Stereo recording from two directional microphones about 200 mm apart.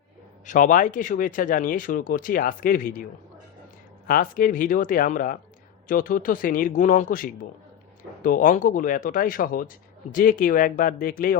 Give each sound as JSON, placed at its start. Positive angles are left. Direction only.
{"t": 0.4, "sound": "speech", "side_deg": 40}